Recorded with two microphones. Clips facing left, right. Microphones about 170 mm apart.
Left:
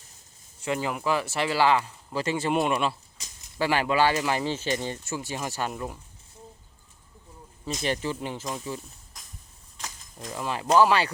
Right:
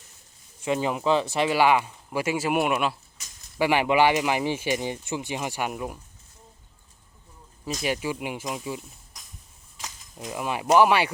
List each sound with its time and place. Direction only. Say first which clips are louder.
0.6 s speech: right 3 dB; 20° right (ahead or behind)
7.6 s speech: right 1 dB; 5° right (ahead or behind)